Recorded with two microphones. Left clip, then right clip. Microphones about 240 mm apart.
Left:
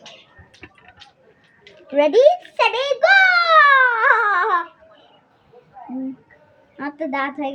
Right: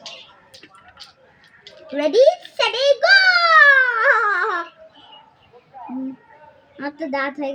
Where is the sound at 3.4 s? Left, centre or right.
Centre.